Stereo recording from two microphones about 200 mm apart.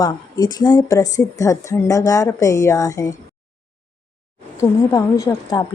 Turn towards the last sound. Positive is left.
turn(degrees=15)  # may be behind; listen again after turning